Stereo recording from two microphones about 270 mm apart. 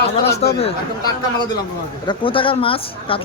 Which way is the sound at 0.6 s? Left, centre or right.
Centre.